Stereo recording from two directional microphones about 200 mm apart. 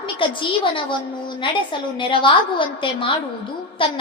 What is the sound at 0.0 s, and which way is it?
Speech, 25° left (ahead or behind).